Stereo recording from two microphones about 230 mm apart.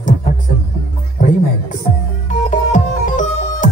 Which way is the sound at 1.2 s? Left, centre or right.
Left.